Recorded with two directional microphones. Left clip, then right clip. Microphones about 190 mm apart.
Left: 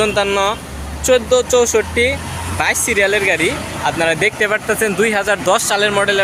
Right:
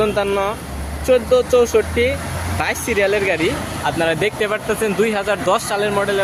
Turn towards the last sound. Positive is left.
turn(degrees=-5)  # may be behind; listen again after turning